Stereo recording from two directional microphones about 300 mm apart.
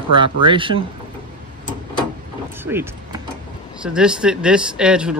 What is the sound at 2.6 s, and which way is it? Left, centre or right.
Power windows, centre.